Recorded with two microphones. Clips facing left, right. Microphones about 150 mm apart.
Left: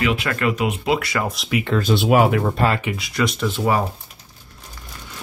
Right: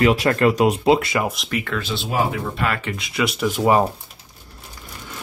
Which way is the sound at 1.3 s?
Centre (ahead or behind).